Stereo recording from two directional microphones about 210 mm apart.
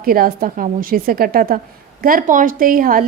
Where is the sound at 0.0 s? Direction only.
45° right (ahead or behind).